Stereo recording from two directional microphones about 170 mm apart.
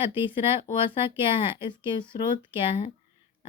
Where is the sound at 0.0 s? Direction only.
30° left (ahead or behind).